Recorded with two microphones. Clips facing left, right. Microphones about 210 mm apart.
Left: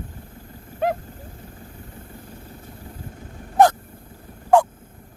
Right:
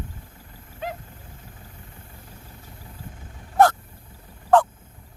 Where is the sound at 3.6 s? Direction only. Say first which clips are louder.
Left 2 dB; 15° left (ahead or behind).